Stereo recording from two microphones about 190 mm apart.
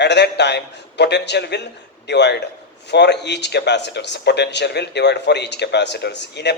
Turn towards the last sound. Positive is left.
turn(degrees=65)  # may be behind; listen again after turning